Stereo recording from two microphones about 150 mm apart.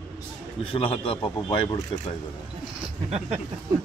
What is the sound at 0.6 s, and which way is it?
A man's voice, 40° left (ahead or behind).